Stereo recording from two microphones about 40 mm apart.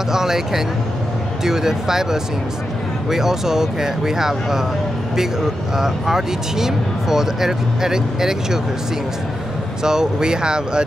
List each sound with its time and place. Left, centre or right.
0.1 s speech: centre
5.8 s speech: centre
9.8 s speech: centre